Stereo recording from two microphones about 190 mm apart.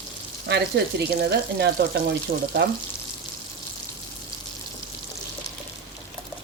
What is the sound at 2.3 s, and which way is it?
Speech, 50° right (ahead or behind).